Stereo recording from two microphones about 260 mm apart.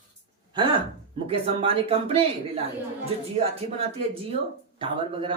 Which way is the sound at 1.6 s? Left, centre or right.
Right.